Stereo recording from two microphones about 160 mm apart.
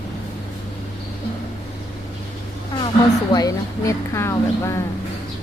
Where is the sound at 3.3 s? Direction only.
20° left (ahead or behind).